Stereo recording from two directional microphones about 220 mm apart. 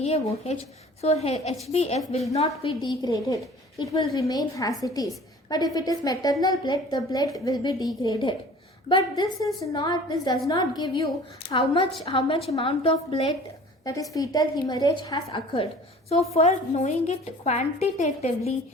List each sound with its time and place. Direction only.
0.0 s a woman's voice: 30° left (ahead or behind)
16.3 s a woman's voice: 30° left (ahead or behind)